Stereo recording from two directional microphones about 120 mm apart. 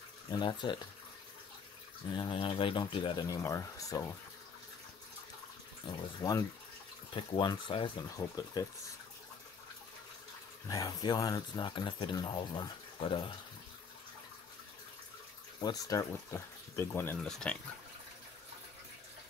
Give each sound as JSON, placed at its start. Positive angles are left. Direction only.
{"t": 0.3, "sound": "speech", "side_deg": 40}
{"t": 2.0, "sound": "speech", "side_deg": 40}
{"t": 3.3, "sound": "speech", "side_deg": 25}
{"t": 6.2, "sound": "speech", "side_deg": 15}
{"t": 7.2, "sound": "speech", "side_deg": 40}
{"t": 10.7, "sound": "speech", "side_deg": 30}
{"t": 15.6, "sound": "speech", "side_deg": 30}
{"t": 17.2, "sound": "speech", "side_deg": 5}